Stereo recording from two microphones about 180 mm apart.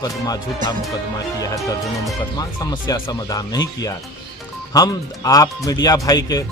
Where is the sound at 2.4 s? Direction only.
25° left (ahead or behind).